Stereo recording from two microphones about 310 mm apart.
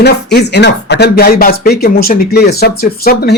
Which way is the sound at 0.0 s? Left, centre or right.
Left.